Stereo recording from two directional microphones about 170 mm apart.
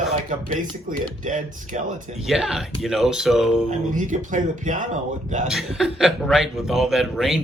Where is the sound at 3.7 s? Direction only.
45° right (ahead or behind).